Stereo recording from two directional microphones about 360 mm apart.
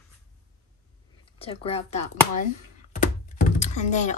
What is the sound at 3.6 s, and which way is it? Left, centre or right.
Speech, centre.